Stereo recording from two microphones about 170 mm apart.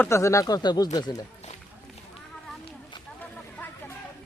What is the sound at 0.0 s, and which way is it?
Speech, 15° left (ahead or behind).